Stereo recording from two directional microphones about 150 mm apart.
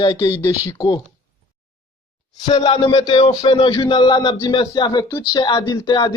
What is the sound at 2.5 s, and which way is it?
Speech, 40° left (ahead or behind).